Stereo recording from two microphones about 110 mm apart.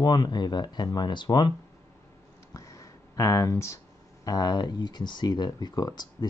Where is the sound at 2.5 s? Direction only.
30° left (ahead or behind).